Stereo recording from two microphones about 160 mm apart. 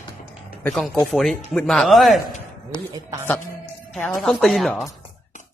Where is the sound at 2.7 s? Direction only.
30° left (ahead or behind).